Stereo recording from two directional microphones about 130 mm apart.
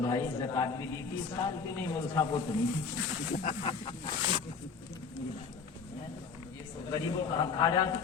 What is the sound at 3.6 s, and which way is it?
Speech, 45° left (ahead or behind).